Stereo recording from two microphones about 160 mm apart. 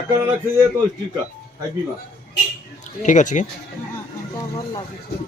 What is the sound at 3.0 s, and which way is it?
Speech, 50° left (ahead or behind).